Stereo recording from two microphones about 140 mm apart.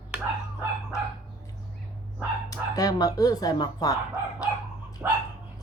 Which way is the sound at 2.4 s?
25° left (ahead or behind).